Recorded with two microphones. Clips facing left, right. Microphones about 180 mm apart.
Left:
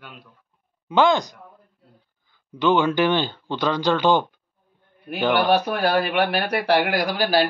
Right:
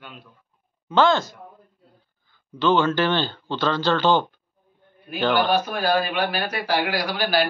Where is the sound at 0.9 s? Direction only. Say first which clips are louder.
Left 1 dB; 15° left (ahead or behind).